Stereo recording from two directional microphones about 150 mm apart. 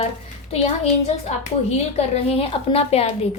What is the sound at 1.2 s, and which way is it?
A woman's voice, 45° left (ahead or behind).